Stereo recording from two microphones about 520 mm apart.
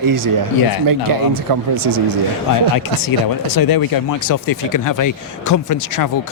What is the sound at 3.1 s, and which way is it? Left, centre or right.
Speech, left.